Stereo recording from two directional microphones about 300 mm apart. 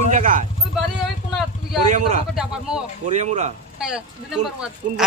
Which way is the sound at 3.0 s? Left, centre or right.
Right.